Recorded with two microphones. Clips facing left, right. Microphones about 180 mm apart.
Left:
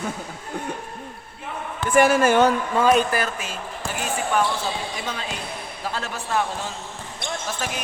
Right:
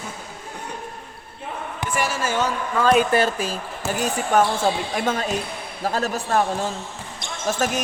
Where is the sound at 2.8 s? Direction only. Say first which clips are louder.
Even; 30° left (ahead or behind).